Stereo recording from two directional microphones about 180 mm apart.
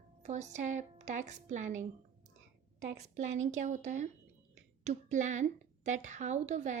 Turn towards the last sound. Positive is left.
turn(degrees=-40)  # may be behind; listen again after turning